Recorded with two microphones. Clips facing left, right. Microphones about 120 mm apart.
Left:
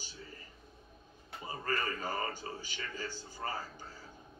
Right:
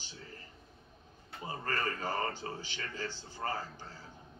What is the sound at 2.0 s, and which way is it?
Speech, 10° left (ahead or behind).